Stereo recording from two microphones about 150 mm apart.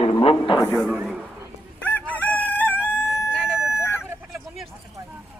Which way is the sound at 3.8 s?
15° left (ahead or behind).